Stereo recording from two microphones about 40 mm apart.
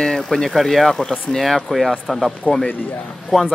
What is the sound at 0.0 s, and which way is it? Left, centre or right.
Speech, centre.